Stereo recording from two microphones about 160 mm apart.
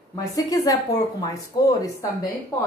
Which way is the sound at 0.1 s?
20° left (ahead or behind).